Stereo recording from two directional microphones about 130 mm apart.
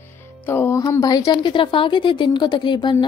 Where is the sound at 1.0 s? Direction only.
30° left (ahead or behind).